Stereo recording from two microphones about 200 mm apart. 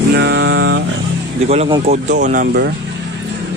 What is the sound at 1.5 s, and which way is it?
Speech, 25° right (ahead or behind).